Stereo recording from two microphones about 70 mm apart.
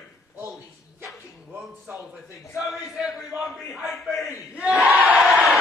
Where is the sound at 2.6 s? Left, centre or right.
Centre.